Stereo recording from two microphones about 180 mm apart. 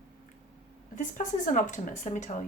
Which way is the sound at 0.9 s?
45° left (ahead or behind).